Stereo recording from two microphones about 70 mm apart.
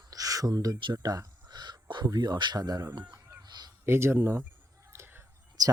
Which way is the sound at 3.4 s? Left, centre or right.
Right.